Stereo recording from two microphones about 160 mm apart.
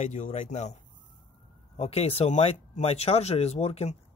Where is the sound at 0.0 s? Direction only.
45° left (ahead or behind).